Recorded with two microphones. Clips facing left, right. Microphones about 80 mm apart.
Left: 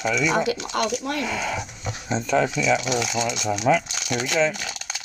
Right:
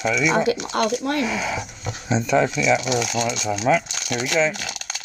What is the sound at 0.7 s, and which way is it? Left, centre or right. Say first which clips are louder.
Speech: right 3 dB; right.